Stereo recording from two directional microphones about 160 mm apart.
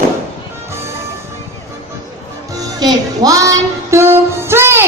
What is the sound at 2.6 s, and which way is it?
Music, 25° right (ahead or behind).